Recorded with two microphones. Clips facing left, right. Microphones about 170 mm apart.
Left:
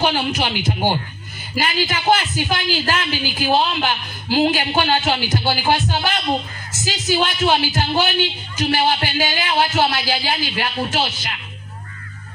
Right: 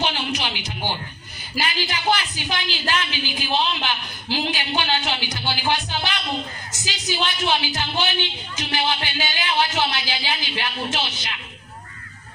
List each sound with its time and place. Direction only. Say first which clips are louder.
0.0 s a man's voice: left 6 dB; 45° left (ahead or behind)
1.6 s a woman's voice: left 4 dB; 45° left (ahead or behind)